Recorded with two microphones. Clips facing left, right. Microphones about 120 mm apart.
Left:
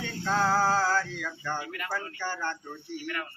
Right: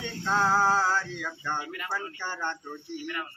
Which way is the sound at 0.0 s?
20° right (ahead or behind).